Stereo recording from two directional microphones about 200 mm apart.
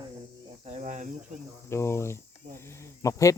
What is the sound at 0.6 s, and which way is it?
Cricket, 35° right (ahead or behind).